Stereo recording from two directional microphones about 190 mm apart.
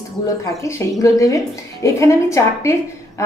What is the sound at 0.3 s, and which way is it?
Speech, 15° left (ahead or behind).